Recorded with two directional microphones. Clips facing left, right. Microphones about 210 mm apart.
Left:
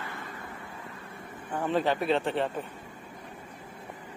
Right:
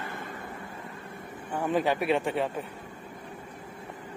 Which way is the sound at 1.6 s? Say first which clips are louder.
Right 1 dB; 10° right (ahead or behind).